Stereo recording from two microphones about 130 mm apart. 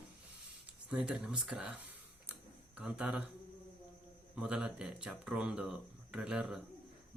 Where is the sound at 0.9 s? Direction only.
5° right (ahead or behind).